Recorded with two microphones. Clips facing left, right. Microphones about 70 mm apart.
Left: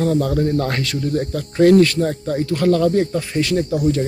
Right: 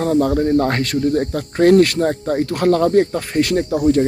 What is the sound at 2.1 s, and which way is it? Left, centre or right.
Speech, right.